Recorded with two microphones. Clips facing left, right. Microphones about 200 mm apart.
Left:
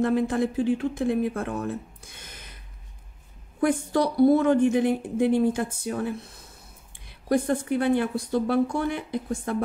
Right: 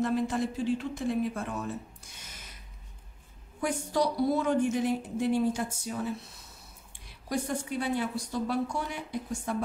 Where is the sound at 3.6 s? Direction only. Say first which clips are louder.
Left 6 dB; 55° left (ahead or behind).